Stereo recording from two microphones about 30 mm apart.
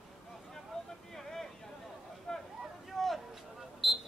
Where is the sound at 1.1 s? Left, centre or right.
Centre.